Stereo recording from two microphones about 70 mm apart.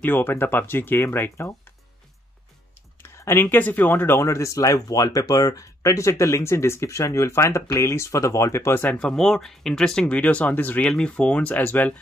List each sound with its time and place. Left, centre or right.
0.0 s speech: left
3.0 s speech: left
8.8 s speech: centre
10.9 s speech: centre